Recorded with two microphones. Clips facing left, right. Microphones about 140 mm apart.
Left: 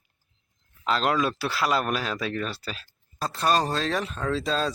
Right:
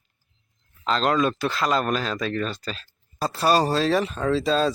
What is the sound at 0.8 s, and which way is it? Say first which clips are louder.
Speech: right 3 dB; 5° left (ahead or behind).